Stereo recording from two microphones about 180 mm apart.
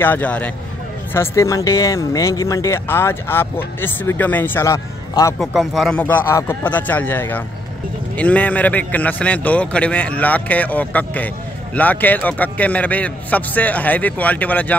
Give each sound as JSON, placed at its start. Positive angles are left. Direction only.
{"t": 0.0, "sound": "speech", "side_deg": 10}
{"t": 5.4, "sound": "speech", "side_deg": 0}